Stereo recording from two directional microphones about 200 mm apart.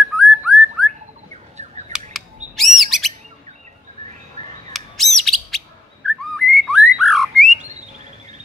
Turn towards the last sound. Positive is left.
turn(degrees=0)  # may be behind; listen again after turning